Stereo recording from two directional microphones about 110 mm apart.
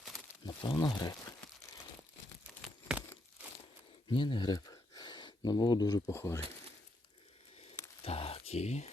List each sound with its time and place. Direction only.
0.4 s speech: 40° left (ahead or behind)
4.1 s speech: 50° left (ahead or behind)
6.1 s speech: 25° left (ahead or behind)
8.0 s a sound: 65° left (ahead or behind); by 8.9 s 90° left